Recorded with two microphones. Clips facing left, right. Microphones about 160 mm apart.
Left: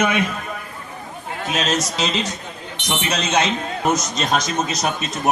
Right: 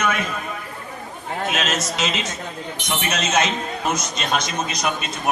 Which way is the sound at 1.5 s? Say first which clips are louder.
Left 2 dB; 35° left (ahead or behind).